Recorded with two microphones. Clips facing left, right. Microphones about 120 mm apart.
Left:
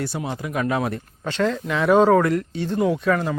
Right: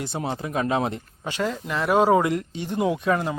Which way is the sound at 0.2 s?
30° right (ahead or behind).